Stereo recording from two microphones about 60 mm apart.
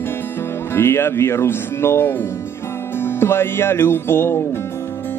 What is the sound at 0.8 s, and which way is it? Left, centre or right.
Music, left.